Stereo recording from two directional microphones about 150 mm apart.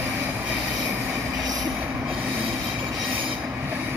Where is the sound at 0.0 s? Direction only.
10° right (ahead or behind).